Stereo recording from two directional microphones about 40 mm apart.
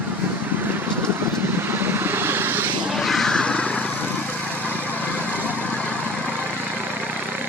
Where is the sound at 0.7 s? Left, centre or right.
Right.